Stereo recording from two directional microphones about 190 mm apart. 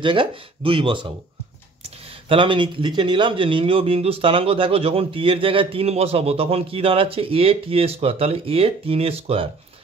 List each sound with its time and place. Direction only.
0.0 s speech: 25° right (ahead or behind)
2.2 s speech: 25° right (ahead or behind)